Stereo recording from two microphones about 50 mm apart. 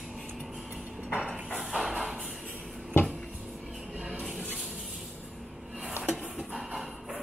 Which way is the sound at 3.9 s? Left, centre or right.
Right.